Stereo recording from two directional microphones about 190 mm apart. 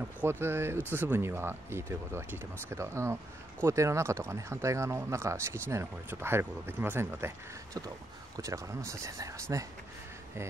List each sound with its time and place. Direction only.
0.2 s speech: 10° right (ahead or behind)